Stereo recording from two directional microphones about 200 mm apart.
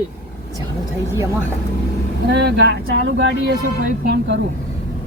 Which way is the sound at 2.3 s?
55° right (ahead or behind).